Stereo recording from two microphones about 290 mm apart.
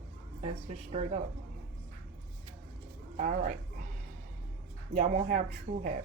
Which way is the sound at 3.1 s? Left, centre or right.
Right.